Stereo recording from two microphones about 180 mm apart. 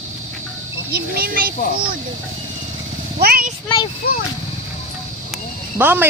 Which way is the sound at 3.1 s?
55° right (ahead or behind).